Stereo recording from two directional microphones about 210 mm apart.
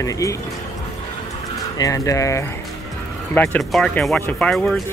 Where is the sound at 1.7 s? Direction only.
15° left (ahead or behind).